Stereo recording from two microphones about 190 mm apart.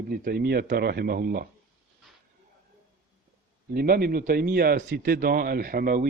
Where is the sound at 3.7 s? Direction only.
50° right (ahead or behind).